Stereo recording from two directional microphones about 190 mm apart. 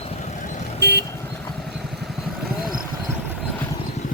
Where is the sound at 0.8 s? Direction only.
60° right (ahead or behind).